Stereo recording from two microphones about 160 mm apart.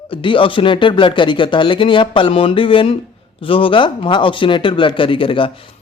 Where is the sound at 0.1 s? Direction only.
30° left (ahead or behind).